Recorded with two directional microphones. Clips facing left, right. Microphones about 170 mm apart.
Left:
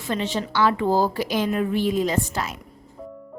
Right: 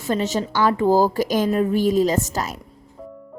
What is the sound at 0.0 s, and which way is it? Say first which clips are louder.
Speech: right 4 dB; 40° right (ahead or behind).